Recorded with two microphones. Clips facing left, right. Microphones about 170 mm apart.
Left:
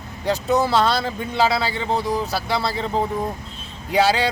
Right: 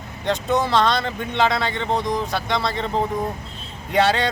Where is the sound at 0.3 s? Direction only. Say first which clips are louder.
Left 1 dB; 5° left (ahead or behind).